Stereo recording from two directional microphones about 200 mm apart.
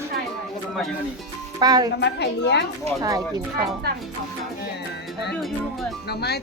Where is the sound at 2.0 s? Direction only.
60° left (ahead or behind).